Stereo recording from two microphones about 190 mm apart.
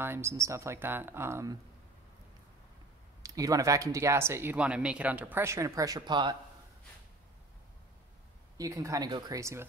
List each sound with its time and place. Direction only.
0.0 s speech: 15° right (ahead or behind)
3.2 s speech: 20° right (ahead or behind)
8.5 s speech: 15° right (ahead or behind)